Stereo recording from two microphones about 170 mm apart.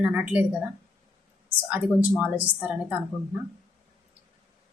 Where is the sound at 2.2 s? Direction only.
10° right (ahead or behind).